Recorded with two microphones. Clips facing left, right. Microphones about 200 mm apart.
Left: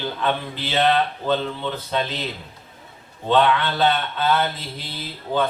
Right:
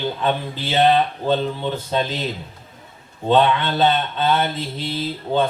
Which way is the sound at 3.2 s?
25° right (ahead or behind).